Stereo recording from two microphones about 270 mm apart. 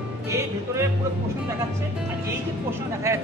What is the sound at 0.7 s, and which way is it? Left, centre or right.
Speech, centre.